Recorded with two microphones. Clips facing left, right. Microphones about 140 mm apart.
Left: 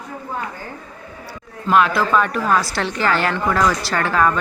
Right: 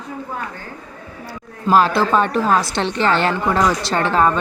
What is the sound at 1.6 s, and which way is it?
A woman's voice, 30° right (ahead or behind).